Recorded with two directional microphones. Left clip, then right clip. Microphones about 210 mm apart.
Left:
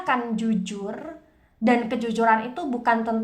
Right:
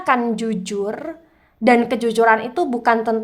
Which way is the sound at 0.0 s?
40° right (ahead or behind).